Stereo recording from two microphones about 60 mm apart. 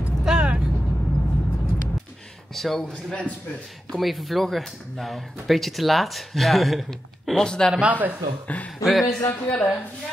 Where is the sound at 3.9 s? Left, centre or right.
Centre.